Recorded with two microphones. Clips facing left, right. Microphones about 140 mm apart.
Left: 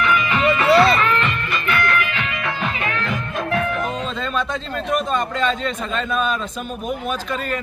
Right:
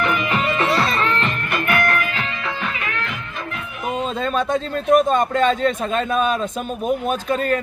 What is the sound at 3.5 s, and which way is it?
Music, 75° left (ahead or behind).